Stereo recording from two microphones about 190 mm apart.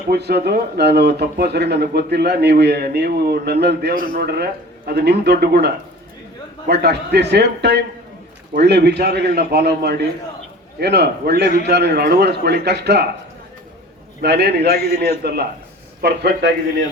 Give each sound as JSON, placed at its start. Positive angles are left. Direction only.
{"t": 0.1, "sound": "speech", "side_deg": -60}
{"t": 14.2, "sound": "speech", "side_deg": -60}